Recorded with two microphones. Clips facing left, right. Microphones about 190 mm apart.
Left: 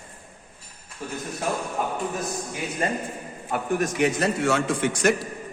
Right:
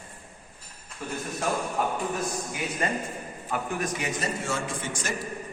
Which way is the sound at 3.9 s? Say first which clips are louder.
Left 8 dB; 70° left (ahead or behind).